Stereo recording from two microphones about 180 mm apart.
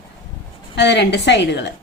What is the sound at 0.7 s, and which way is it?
Speech, 75° left (ahead or behind).